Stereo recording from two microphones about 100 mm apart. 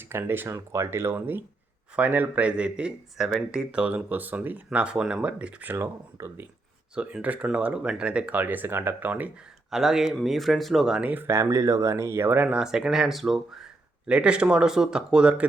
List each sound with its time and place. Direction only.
0.1 s speech: 20° right (ahead or behind)
6.9 s speech: 10° right (ahead or behind)
9.6 s speech: 5° right (ahead or behind)